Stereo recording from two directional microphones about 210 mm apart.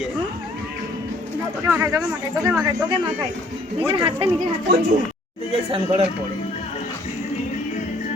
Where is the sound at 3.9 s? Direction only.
20° right (ahead or behind).